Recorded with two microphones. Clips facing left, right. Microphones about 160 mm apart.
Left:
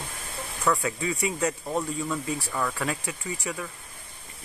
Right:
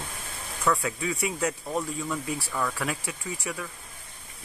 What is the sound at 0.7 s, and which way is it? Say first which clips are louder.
Speech: left 1 dB; centre (ahead or behind).